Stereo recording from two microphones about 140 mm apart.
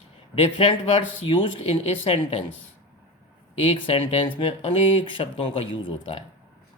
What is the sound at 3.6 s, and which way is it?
Speech, 45° left (ahead or behind).